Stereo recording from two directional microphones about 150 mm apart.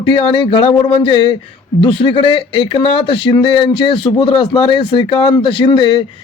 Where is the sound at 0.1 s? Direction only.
35° left (ahead or behind).